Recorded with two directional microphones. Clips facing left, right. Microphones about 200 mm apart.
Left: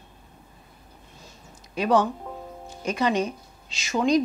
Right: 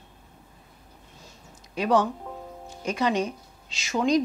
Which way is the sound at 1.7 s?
20° left (ahead or behind).